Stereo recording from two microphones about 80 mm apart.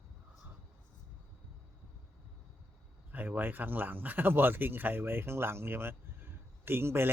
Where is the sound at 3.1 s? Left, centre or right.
Right.